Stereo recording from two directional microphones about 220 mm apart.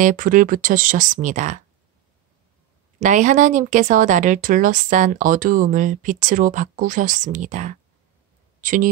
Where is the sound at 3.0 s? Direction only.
35° right (ahead or behind).